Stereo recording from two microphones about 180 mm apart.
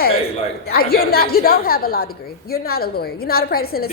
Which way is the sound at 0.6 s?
60° left (ahead or behind).